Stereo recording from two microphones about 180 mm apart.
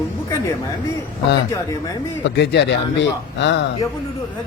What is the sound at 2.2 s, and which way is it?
A man's voice, 70° left (ahead or behind).